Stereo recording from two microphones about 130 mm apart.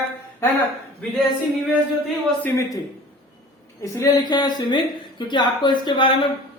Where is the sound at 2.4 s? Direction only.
20° left (ahead or behind).